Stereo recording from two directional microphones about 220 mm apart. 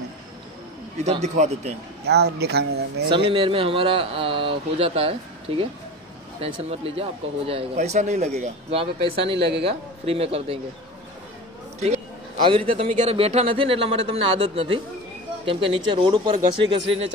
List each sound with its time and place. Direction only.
0.9 s speech: 30° right (ahead or behind)
2.0 s speech: 50° right (ahead or behind)
3.1 s speech: 25° right (ahead or behind)
6.7 s speech: 25° right (ahead or behind)
12.4 s speech: 25° right (ahead or behind)
16.6 s speech: 60° right (ahead or behind)